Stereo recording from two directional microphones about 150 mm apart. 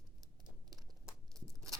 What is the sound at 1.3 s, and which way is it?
Tearing, 25° right (ahead or behind).